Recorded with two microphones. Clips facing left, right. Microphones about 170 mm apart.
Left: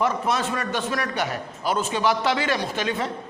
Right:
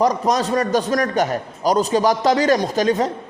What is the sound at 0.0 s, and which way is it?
A man's voice, 40° right (ahead or behind).